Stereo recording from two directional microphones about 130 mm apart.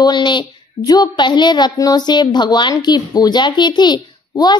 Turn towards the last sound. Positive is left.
turn(degrees=35)  # may be behind; listen again after turning